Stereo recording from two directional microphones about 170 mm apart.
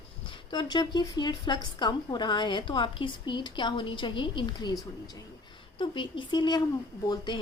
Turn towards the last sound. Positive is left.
turn(degrees=25)  # may be behind; listen again after turning